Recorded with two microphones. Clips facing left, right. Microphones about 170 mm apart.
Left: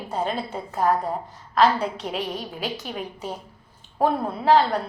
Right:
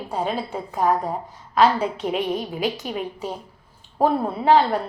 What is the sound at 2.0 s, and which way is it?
A woman's voice, 5° right (ahead or behind).